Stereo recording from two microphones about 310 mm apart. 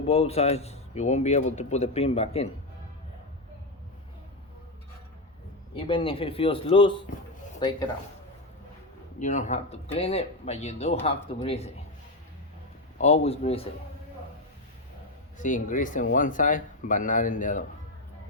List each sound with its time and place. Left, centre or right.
0.1 s a man's voice: centre
5.7 s speech: centre
9.1 s a man's voice: left
13.0 s a man's voice: centre
15.4 s a man's voice: left